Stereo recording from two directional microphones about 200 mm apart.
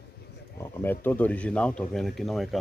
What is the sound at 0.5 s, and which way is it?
Speech, 10° left (ahead or behind).